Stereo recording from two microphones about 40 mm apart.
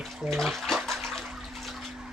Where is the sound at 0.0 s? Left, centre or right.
Centre.